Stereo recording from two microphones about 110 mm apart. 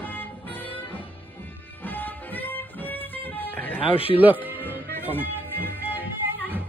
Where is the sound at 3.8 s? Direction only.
55° left (ahead or behind).